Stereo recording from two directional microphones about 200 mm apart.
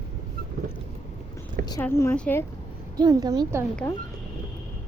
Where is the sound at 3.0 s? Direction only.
20° right (ahead or behind).